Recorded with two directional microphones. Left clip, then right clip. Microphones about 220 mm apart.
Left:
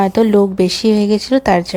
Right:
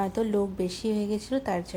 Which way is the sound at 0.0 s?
40° left (ahead or behind).